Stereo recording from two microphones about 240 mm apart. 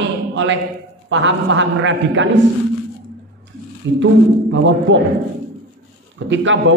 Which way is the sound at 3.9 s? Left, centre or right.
Right.